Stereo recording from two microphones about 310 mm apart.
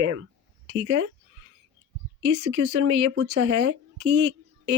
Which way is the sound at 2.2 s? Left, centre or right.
Right.